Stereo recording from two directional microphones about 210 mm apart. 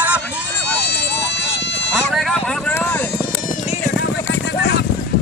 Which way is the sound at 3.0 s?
50° left (ahead or behind).